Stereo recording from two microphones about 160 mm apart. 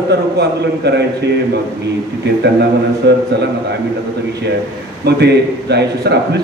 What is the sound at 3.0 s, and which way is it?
Speech, 90° right.